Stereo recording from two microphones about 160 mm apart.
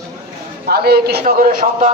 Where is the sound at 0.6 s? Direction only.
75° right (ahead or behind); by 1.9 s 55° right (ahead or behind).